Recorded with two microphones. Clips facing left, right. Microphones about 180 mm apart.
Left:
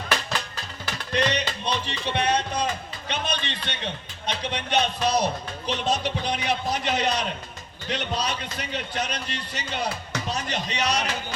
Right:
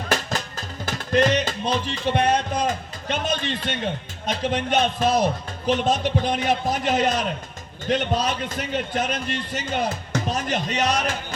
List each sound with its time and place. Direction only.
0.1 s music: 45° right (ahead or behind)
7.9 s a man's voice: 50° right (ahead or behind)